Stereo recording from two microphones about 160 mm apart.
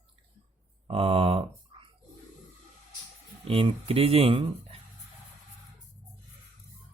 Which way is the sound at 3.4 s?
35° right (ahead or behind).